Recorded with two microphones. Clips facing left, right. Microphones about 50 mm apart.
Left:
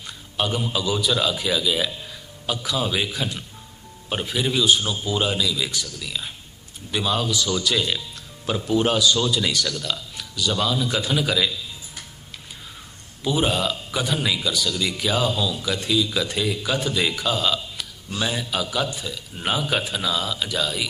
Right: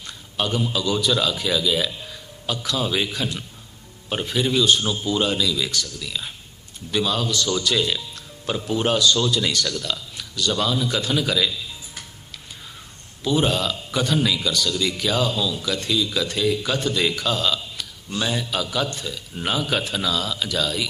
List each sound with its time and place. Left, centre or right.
0.0 s a man's voice: centre
13.2 s speech: centre